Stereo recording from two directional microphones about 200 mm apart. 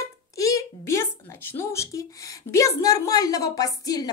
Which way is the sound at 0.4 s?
15° left (ahead or behind).